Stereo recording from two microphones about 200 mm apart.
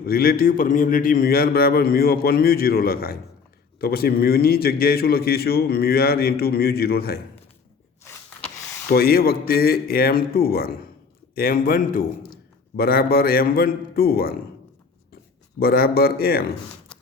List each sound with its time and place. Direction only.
0.0 s a man's voice: 50° left (ahead or behind)
8.9 s a man's voice: 50° left (ahead or behind)
15.5 s a man's voice: 50° left (ahead or behind)